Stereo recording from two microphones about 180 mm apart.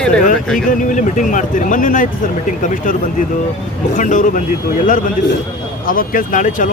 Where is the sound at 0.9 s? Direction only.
45° left (ahead or behind).